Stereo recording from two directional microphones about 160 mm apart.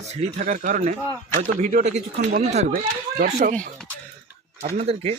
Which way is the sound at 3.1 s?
60° right (ahead or behind).